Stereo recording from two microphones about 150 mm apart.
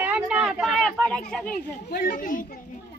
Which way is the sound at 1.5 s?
75° left (ahead or behind).